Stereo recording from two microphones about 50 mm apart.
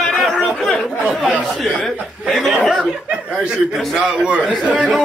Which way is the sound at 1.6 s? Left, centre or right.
Centre.